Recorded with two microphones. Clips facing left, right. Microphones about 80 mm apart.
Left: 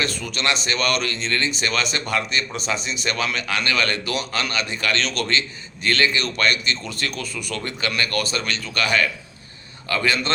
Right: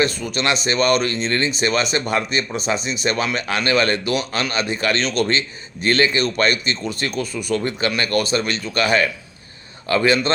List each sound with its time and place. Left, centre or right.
0.0 s speech: right